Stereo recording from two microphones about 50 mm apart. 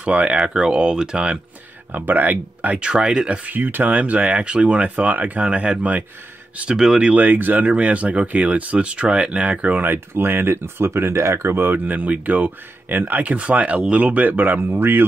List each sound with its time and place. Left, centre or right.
0.0 s speech: right
1.9 s speech: right
2.8 s speech: centre
3.3 s speech: right
5.4 s speech: right
6.8 s speech: centre
7.2 s speech: right
9.8 s speech: right
10.9 s speech: right
11.7 s speech: right
13.3 s speech: right